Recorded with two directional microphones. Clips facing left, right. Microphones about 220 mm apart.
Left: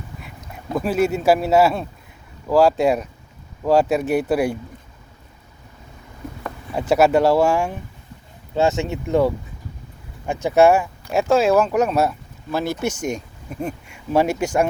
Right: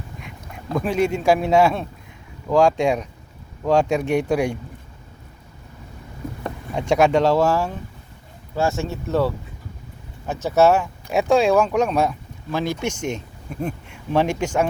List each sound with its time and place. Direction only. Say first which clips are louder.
0.7 s speech: left 1 dB; 5° left (ahead or behind)
6.7 s speech: left 1 dB; 5° left (ahead or behind)
11.1 s speech: even; centre (ahead or behind)